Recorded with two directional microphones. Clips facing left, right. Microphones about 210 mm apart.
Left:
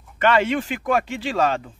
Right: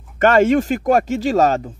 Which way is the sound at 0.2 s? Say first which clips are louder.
Right 6 dB; 45° right (ahead or behind).